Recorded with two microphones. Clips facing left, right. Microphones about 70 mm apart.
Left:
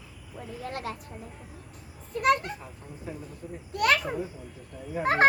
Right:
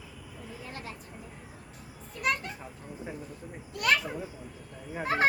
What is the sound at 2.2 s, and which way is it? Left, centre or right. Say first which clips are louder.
Speech: left 7 dB; left.